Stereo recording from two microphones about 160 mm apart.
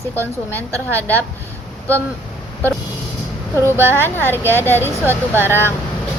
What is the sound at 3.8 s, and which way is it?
Speech, 15° left (ahead or behind).